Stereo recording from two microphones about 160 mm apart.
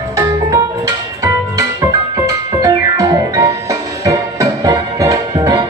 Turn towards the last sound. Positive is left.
turn(degrees=-25)  # may be behind; listen again after turning